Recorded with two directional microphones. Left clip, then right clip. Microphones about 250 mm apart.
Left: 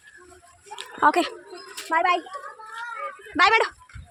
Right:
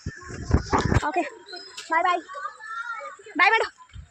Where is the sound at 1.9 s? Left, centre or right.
Centre.